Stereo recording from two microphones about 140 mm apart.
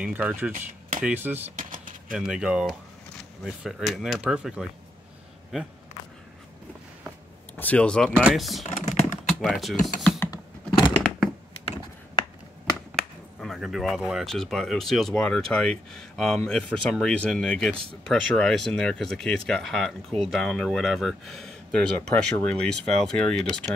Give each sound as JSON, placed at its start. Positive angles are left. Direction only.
{"t": 0.0, "sound": "speech", "side_deg": -10}
{"t": 0.6, "sound": "a sound", "side_deg": -75}
{"t": 1.0, "sound": "speech", "side_deg": -15}
{"t": 1.6, "sound": "a sound", "side_deg": -75}
{"t": 2.1, "sound": "speech", "side_deg": -5}
{"t": 7.5, "sound": "speech", "side_deg": 10}
{"t": 8.1, "sound": "speech", "side_deg": -5}
{"t": 8.6, "sound": "computer keyboard", "side_deg": 55}
{"t": 9.3, "sound": "speech", "side_deg": 0}
{"t": 10.1, "sound": "a sound", "side_deg": 20}
{"t": 12.9, "sound": "speech", "side_deg": 0}